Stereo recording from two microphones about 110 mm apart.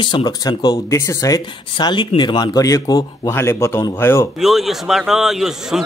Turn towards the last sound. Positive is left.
turn(degrees=-5)  # may be behind; listen again after turning